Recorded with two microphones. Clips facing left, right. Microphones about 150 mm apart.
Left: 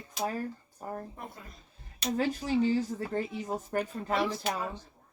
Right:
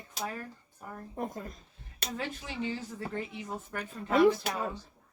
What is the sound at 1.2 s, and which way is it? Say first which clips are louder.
Speech: right 8 dB; 40° right (ahead or behind).